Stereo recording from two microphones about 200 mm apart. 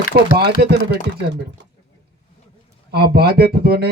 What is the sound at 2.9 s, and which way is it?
Speech, 50° right (ahead or behind).